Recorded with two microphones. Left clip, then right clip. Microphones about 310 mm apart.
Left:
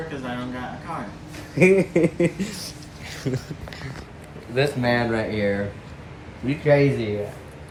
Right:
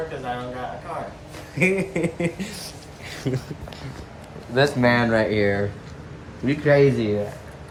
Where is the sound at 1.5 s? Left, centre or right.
Centre.